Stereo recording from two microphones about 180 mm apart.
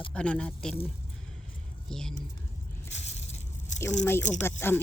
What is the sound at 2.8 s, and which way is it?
Crushing, 40° left (ahead or behind).